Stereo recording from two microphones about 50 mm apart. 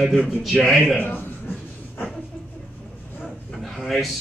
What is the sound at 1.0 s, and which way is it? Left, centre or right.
Speech, left.